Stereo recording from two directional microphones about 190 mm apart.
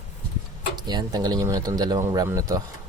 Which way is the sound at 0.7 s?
20° right (ahead or behind).